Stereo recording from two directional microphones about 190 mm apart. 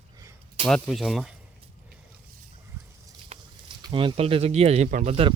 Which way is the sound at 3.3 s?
35° right (ahead or behind).